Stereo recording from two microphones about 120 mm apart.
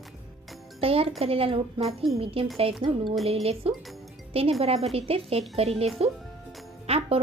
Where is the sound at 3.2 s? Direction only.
55° right (ahead or behind).